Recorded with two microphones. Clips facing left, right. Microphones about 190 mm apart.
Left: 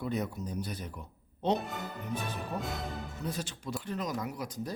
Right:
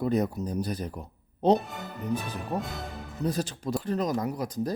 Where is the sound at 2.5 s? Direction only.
65° right (ahead or behind).